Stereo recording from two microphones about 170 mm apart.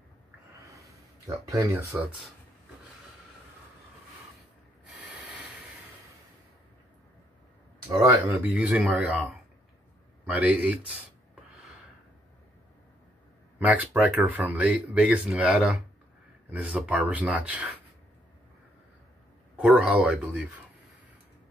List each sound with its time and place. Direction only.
0.7 s a sound: 20° right (ahead or behind)
7.9 s speech: 20° right (ahead or behind)
8.3 s speech: 5° right (ahead or behind)
13.6 s speech: 10° right (ahead or behind)
19.6 s speech: 5° right (ahead or behind)